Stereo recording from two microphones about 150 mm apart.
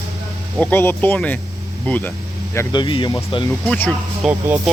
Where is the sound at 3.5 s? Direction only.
10° left (ahead or behind).